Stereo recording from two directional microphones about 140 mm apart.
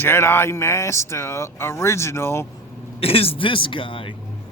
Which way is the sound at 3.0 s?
40° left (ahead or behind).